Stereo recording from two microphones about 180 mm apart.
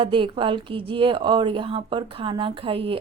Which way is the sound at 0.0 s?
30° right (ahead or behind).